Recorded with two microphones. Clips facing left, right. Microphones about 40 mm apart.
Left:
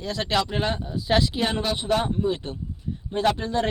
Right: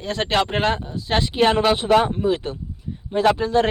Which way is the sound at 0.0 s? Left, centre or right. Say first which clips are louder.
Right 4 dB; right.